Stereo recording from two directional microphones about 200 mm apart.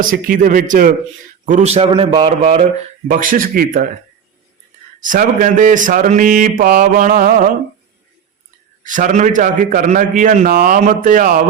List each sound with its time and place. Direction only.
0.0 s a man's voice: 45° right (ahead or behind)
5.0 s a man's voice: 40° right (ahead or behind)
8.8 s a man's voice: 40° right (ahead or behind)